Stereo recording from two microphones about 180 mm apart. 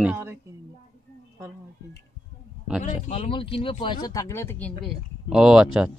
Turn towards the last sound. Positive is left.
turn(degrees=-5)  # may be behind; listen again after turning